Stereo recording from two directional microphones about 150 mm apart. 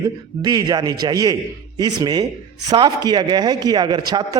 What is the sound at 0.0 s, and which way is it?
A man's voice, 25° right (ahead or behind).